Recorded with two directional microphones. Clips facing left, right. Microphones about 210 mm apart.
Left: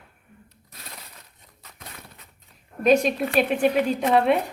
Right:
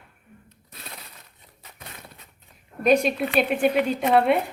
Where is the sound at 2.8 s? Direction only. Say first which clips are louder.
Left 1 dB; centre (ahead or behind).